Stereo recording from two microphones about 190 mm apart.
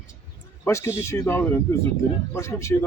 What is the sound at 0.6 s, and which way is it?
A man's voice, 15° left (ahead or behind).